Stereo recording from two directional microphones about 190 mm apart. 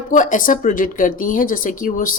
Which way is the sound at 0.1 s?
45° left (ahead or behind).